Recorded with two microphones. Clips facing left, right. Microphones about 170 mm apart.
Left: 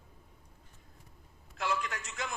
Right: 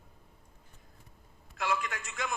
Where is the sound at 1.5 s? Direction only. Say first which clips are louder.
Right 1 dB; 50° right (ahead or behind).